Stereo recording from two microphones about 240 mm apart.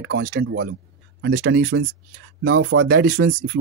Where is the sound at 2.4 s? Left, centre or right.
Right.